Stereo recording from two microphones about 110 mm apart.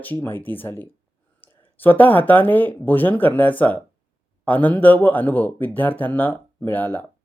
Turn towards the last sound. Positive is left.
turn(degrees=15)  # may be behind; listen again after turning